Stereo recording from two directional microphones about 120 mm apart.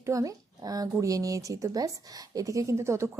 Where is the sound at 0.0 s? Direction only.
25° right (ahead or behind).